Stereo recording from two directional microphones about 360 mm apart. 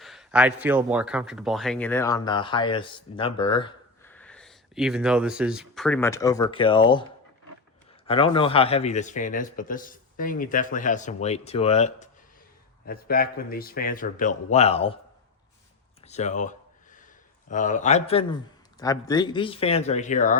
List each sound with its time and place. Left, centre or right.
0.0 s speech: centre
8.0 s a man's voice: centre
16.0 s a sound: centre
17.5 s a man's voice: left